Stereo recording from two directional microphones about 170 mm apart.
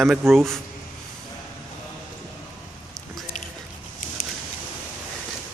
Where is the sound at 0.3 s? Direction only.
Centre (ahead or behind).